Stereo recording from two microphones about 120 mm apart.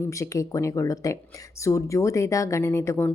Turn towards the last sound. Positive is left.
turn(degrees=20)  # may be behind; listen again after turning